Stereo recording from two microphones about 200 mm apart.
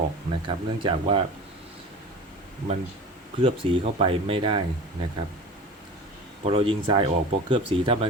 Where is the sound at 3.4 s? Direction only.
25° right (ahead or behind).